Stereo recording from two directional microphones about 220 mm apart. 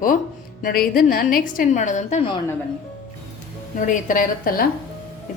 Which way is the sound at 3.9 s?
35° left (ahead or behind).